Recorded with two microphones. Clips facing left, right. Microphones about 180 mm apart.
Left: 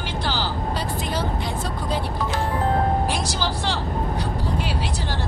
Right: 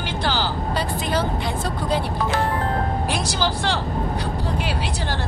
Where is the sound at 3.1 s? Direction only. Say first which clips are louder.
Right 2 dB; 65° right (ahead or behind).